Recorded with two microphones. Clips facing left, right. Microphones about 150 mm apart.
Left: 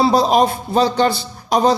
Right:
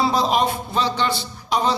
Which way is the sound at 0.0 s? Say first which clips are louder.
Left 5 dB; 40° left (ahead or behind).